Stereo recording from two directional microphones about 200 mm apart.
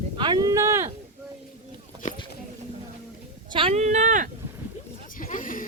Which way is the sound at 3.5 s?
30° right (ahead or behind).